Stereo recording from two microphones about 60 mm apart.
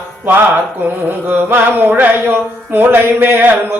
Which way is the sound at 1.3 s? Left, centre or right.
Right.